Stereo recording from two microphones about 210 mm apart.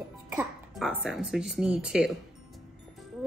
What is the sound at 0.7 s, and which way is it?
Speech, centre (ahead or behind).